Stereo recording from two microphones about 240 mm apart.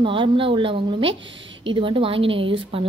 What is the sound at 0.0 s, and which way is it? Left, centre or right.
A woman's voice, right.